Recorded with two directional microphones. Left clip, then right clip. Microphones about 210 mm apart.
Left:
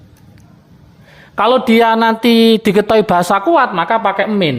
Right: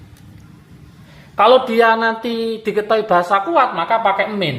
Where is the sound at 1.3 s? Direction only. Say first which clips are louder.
Even; 55° left (ahead or behind).